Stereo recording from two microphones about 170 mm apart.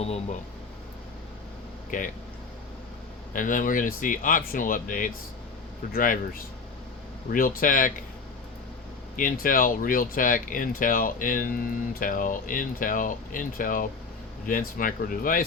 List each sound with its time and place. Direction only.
3.3 s speech: 50° left (ahead or behind)
7.3 s speech: 55° left (ahead or behind)
9.1 s speech: 55° left (ahead or behind)